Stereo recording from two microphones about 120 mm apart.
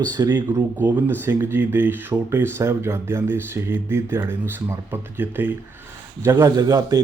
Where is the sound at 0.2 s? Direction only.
30° right (ahead or behind).